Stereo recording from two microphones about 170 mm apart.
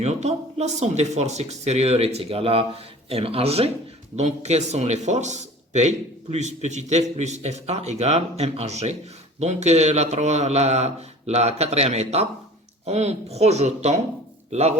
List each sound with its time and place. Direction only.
0.0 s speech: 40° right (ahead or behind)